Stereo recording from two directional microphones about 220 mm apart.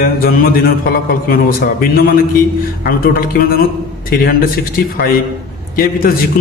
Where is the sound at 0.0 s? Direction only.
40° left (ahead or behind).